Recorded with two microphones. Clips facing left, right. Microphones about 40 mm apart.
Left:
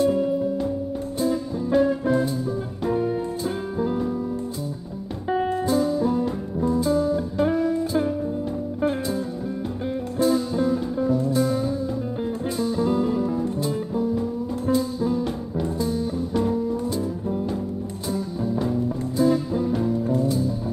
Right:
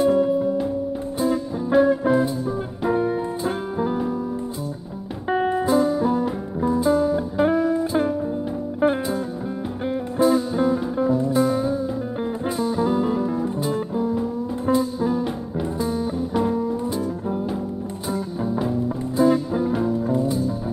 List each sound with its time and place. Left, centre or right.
0.0 s music: centre; by 3.9 s right
5.5 s music: right
10.1 s music: right